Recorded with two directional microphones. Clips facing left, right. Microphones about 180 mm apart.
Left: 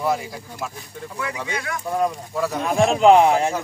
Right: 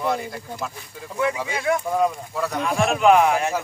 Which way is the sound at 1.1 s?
25° right (ahead or behind).